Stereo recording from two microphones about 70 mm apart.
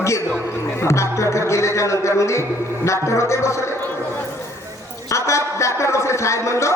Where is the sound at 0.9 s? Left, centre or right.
Left.